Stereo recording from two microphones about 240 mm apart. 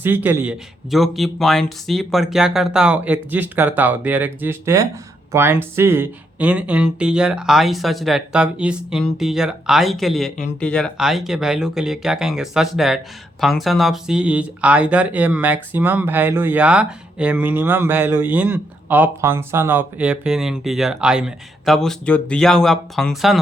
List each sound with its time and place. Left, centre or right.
0.0 s speech: centre